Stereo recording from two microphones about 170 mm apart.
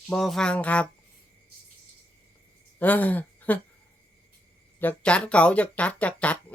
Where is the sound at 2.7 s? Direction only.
10° left (ahead or behind).